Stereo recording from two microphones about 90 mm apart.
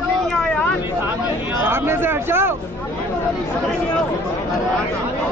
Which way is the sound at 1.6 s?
25° right (ahead or behind).